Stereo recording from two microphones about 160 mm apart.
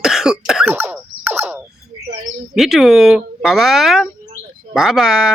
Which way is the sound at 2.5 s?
Centre (ahead or behind).